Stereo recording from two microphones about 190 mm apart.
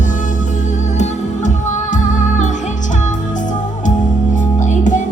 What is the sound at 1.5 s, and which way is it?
Music, 40° left (ahead or behind).